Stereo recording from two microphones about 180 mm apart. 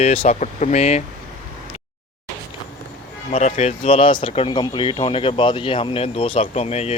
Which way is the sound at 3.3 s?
35° left (ahead or behind).